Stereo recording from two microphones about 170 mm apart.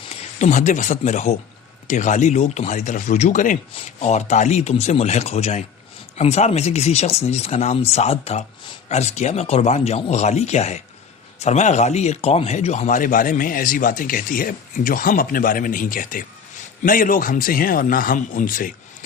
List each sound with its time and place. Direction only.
0.0 s a man's voice: 40° left (ahead or behind)
3.7 s a man's voice: 35° left (ahead or behind); by 18.7 s 55° left (ahead or behind)